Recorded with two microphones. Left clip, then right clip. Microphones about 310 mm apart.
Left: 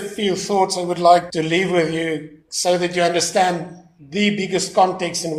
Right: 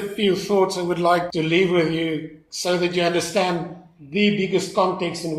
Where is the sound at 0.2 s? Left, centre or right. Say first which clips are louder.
Left 1 dB; centre.